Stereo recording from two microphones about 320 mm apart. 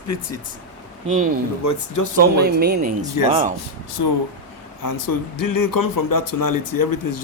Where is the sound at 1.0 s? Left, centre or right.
Right.